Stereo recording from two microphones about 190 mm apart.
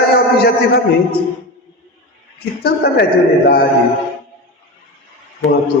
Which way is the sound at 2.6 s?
55° left (ahead or behind).